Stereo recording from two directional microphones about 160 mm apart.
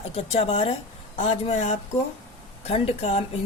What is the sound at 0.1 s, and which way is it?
A woman's voice, 40° left (ahead or behind).